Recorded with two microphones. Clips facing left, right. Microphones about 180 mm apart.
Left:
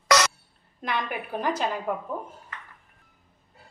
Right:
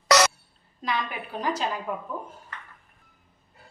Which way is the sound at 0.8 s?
55° left (ahead or behind).